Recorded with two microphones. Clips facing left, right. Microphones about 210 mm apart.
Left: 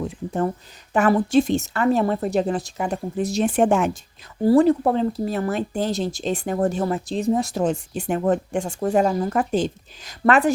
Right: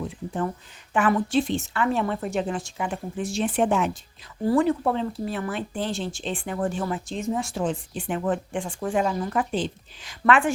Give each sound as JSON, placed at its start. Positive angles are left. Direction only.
{"t": 0.9, "sound": "speech", "side_deg": 40}
{"t": 4.4, "sound": "speech", "side_deg": 35}